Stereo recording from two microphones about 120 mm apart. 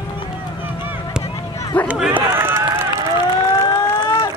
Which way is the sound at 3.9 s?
35° left (ahead or behind).